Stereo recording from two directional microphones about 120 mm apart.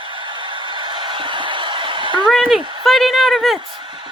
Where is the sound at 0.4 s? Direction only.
45° right (ahead or behind).